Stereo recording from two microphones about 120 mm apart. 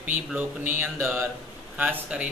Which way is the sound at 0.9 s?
Centre (ahead or behind).